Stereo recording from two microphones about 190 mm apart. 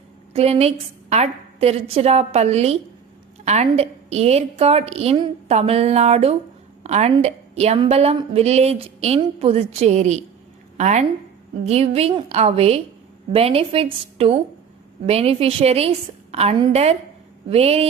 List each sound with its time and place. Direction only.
0.3 s a woman's voice: 30° right (ahead or behind)